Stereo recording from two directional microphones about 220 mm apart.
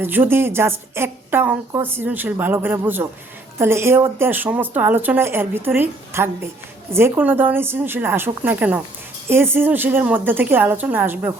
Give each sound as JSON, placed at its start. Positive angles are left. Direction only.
{"t": 0.0, "sound": "a woman's voice", "side_deg": -10}